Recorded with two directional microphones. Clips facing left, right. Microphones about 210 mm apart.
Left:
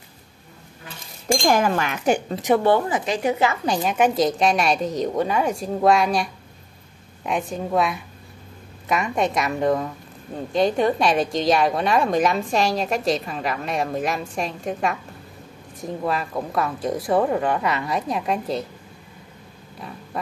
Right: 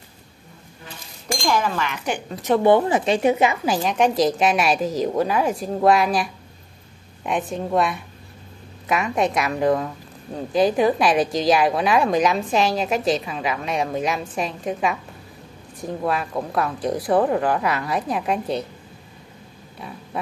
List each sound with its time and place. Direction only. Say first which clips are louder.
1.4 s speech: left 1 dB; 50° left (ahead or behind)
2.5 s speech: left 1 dB; 10° left (ahead or behind)
2.9 s a woman's voice: right 4 dB; 25° right (ahead or behind)
3.6 s a woman's voice: even; centre (ahead or behind)